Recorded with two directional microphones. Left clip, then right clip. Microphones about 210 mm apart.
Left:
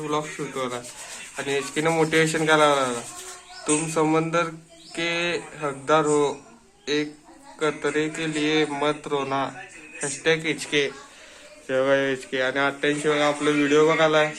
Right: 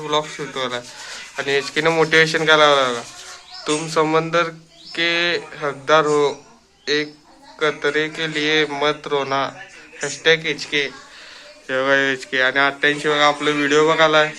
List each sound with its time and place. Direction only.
0.0 s a man's voice: 5° left (ahead or behind); by 10.9 s 20° left (ahead or behind)
11.7 s speech: 10° left (ahead or behind)